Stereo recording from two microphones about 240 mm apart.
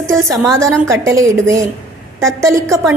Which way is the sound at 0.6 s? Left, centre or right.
Centre.